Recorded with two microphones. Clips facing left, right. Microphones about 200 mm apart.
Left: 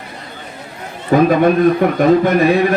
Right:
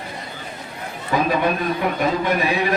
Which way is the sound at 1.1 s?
50° left (ahead or behind).